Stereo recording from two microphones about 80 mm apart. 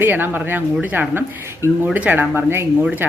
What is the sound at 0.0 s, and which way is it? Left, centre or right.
A woman's voice, right.